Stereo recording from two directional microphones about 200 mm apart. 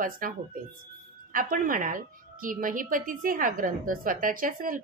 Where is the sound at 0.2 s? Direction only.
45° right (ahead or behind).